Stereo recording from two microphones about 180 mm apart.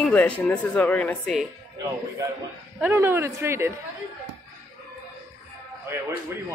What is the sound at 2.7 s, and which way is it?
Speech, 10° right (ahead or behind).